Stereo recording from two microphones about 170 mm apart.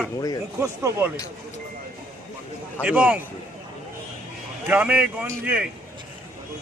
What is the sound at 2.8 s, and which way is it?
Speech, 10° right (ahead or behind).